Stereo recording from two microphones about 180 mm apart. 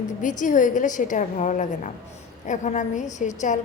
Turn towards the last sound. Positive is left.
turn(degrees=45)  # may be behind; listen again after turning